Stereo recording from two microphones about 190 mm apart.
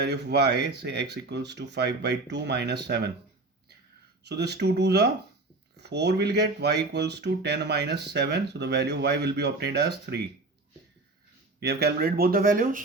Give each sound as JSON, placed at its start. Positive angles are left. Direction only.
{"t": 0.0, "sound": "speech", "side_deg": -60}
{"t": 4.2, "sound": "speech", "side_deg": -60}
{"t": 11.6, "sound": "speech", "side_deg": -60}